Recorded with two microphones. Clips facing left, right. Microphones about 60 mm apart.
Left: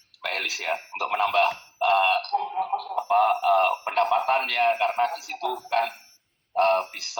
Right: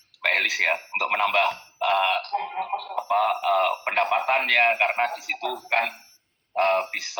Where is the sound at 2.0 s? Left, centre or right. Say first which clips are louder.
Left 1 dB; right.